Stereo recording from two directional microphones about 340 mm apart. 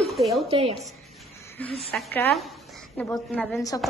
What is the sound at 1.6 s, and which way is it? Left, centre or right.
A woman's voice, centre.